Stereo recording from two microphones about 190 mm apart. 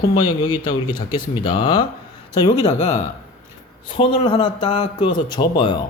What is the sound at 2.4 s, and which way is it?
Speech, 35° left (ahead or behind).